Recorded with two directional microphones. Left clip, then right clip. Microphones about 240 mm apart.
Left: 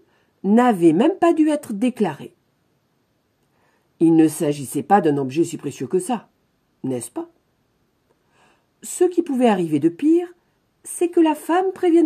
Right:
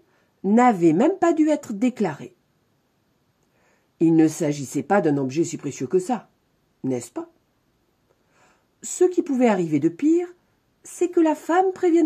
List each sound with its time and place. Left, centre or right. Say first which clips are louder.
0.4 s speech: left 1 dB; centre
4.0 s speech: left 3 dB; centre
8.4 s a woman's voice: right 1 dB; centre